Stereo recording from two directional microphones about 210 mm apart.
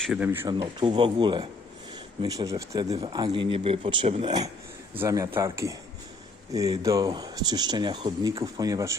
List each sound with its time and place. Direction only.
0.0 s speech: 5° right (ahead or behind)